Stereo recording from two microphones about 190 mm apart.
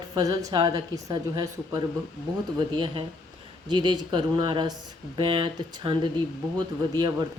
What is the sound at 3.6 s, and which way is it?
A woman's voice, 25° right (ahead or behind).